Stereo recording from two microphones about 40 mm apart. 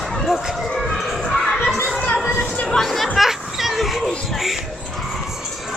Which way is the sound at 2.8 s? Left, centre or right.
Centre.